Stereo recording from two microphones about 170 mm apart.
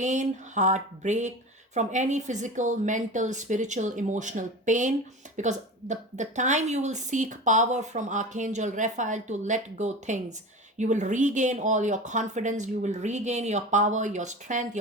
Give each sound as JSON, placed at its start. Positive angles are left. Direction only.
{"t": 0.0, "sound": "a woman's voice", "side_deg": -45}